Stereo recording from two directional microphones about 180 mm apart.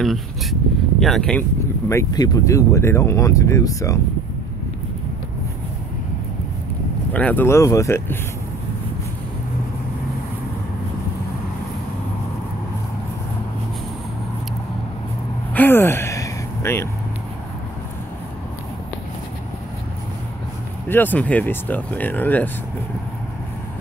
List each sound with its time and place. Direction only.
0.0 s speech: centre (ahead or behind)
1.9 s speech: 20° left (ahead or behind)
7.2 s speech: 10° left (ahead or behind)
15.5 s a sound: 10° left (ahead or behind)
20.9 s speech: 10° left (ahead or behind)